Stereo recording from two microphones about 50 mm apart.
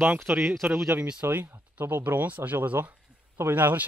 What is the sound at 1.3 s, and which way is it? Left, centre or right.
Speech, right.